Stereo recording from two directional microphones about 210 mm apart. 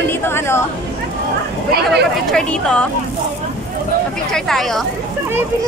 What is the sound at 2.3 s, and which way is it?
Speech, 5° left (ahead or behind).